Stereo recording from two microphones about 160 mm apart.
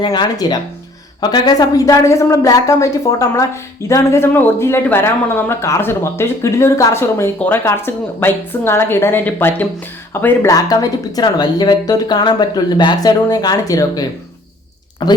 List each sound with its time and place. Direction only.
0.0 s a woman's voice: 25° left (ahead or behind)